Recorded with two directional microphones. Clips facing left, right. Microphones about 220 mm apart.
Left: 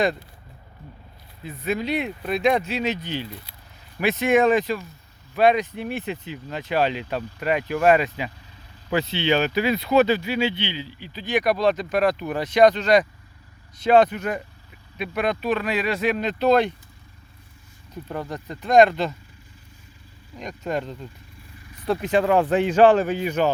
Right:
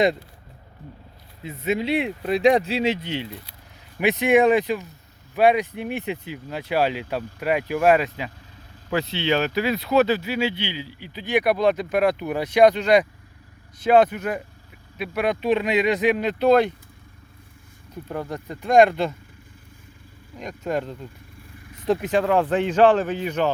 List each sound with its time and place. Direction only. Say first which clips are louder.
1.5 s speech: right 2 dB; 25° right (ahead or behind); by 15.4 s 10° right (ahead or behind)
15.4 s speech: right 3 dB; 25° right (ahead or behind)
17.9 s speech: right 1 dB; 10° right (ahead or behind)
20.3 s speech: right 1 dB; 5° right (ahead or behind)
21.3 s vehicle: right 2 dB; 55° right (ahead or behind)
22.0 s speech: left 4 dB; 5° left (ahead or behind)